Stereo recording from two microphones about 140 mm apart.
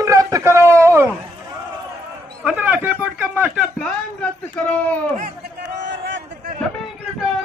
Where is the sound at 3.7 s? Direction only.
5° left (ahead or behind).